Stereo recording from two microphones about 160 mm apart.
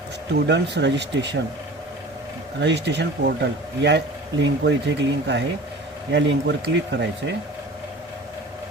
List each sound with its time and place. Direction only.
0.4 s speech: 90° right
2.6 s speech: 90° right